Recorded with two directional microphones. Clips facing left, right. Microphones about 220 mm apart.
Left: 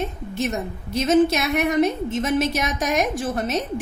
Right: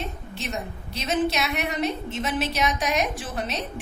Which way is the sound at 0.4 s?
45° left (ahead or behind).